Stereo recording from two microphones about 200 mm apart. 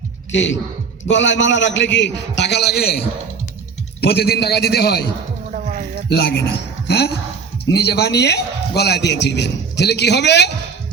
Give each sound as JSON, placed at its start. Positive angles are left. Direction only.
{"t": 0.3, "sound": "a man's voice", "side_deg": 65}
{"t": 4.0, "sound": "a man's voice", "side_deg": 55}
{"t": 5.5, "sound": "a sound", "side_deg": -40}
{"t": 6.1, "sound": "a man's voice", "side_deg": 55}